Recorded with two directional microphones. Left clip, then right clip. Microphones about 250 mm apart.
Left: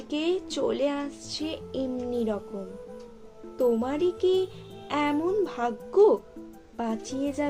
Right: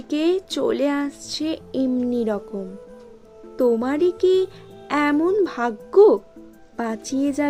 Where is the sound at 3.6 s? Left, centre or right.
Right.